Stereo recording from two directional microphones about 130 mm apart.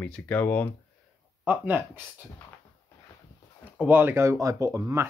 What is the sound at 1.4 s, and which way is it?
Speech, 15° right (ahead or behind).